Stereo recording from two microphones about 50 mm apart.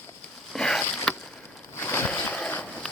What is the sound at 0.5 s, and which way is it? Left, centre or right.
Rowboat, centre.